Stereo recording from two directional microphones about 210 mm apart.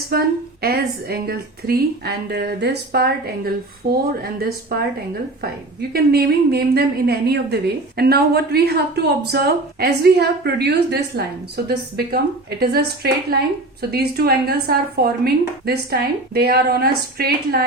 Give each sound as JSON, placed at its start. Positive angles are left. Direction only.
{"t": 0.1, "sound": "a woman's voice", "side_deg": -45}
{"t": 5.9, "sound": "a woman's voice", "side_deg": -45}